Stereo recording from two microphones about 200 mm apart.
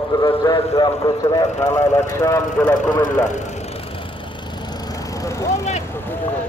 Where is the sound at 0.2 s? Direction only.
20° left (ahead or behind).